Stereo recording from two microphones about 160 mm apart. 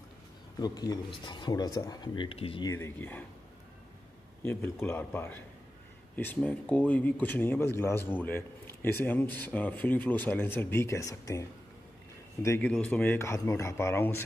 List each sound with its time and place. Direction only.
0.6 s speech: 25° left (ahead or behind)
2.7 s speech: 15° left (ahead or behind)
4.5 s speech: 15° left (ahead or behind)